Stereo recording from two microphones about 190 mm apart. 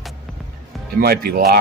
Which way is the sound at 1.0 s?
55° right (ahead or behind).